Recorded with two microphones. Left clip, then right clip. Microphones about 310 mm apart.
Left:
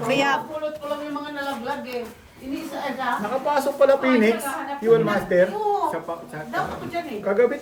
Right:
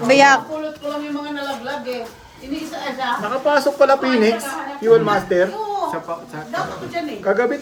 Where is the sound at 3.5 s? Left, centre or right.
Right.